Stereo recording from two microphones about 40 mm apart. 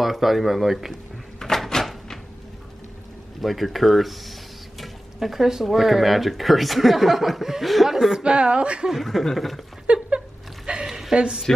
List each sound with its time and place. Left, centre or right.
0.0 s speech: centre
1.4 s door: centre
3.3 s speech: centre
8.2 s speech: right
8.9 s speech: centre
9.9 s a sound: right
10.9 s a sound: centre
11.1 s speech: centre